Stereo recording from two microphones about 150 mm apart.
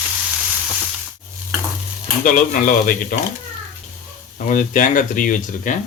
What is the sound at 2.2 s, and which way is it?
Speech, 65° left (ahead or behind).